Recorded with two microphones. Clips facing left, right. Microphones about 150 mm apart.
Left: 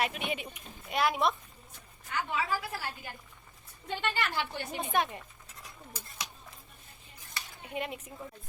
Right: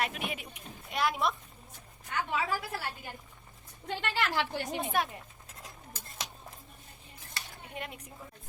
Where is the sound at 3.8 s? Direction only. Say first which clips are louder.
Right 1 dB; 90° right.